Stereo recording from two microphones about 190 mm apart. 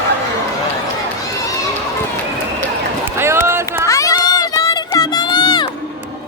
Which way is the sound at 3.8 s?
15° left (ahead or behind).